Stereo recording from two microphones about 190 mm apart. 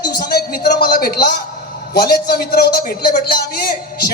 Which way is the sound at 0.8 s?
50° left (ahead or behind).